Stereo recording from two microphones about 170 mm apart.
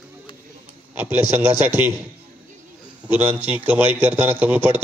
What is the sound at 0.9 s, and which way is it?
A man's voice, 15° right (ahead or behind).